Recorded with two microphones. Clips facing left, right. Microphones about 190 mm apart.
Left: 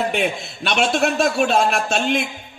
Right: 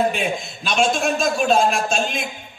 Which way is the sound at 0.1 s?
65° left (ahead or behind).